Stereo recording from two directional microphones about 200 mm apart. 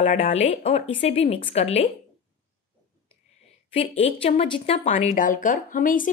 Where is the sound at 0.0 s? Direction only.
30° left (ahead or behind).